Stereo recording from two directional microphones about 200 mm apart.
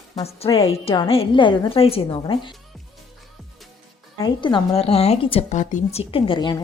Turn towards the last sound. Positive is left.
turn(degrees=25)  # may be behind; listen again after turning